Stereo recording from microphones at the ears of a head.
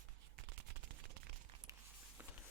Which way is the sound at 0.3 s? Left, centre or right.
Right.